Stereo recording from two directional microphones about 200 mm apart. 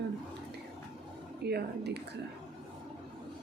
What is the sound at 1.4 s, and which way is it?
Speech, 55° right (ahead or behind).